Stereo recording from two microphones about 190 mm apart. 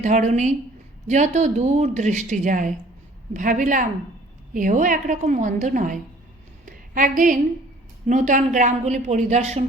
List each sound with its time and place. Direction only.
0.0 s a woman's voice: 40° right (ahead or behind)